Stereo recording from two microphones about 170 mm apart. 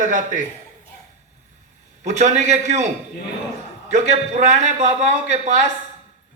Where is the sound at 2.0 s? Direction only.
45° right (ahead or behind).